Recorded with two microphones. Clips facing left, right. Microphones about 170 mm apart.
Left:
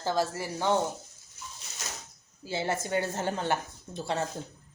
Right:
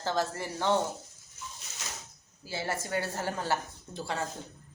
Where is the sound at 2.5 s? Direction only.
20° left (ahead or behind).